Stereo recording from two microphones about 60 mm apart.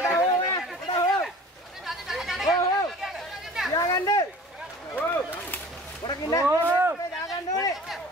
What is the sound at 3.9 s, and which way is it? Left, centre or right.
Speech, left.